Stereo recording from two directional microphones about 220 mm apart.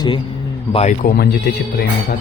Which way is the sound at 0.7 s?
30° left (ahead or behind).